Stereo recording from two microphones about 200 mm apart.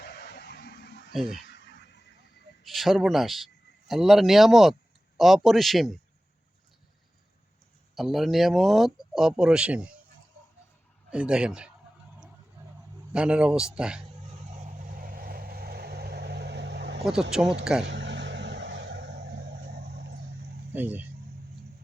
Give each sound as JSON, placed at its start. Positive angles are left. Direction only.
{"t": 0.0, "sound": "a sound", "side_deg": 55}
{"t": 2.6, "sound": "a man's voice", "side_deg": 0}
{"t": 7.9, "sound": "speech", "side_deg": 0}
{"t": 11.1, "sound": "speech", "side_deg": -5}
{"t": 13.1, "sound": "speech", "side_deg": -5}
{"t": 14.3, "sound": "vehicle", "side_deg": -35}
{"t": 17.6, "sound": "speech", "side_deg": -5}
{"t": 17.8, "sound": "vehicle", "side_deg": -60}
{"t": 20.7, "sound": "speech", "side_deg": -10}